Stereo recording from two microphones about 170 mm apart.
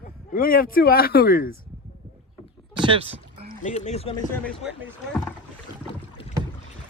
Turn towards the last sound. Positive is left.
turn(degrees=35)  # may be behind; listen again after turning